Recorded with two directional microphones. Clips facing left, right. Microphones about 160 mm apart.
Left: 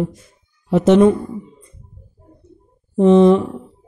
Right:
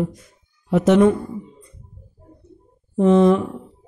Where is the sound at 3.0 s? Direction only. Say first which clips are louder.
Left 4 dB; 25° left (ahead or behind).